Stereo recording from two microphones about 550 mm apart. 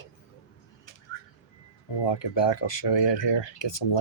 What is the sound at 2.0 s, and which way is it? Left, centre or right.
Speech, left.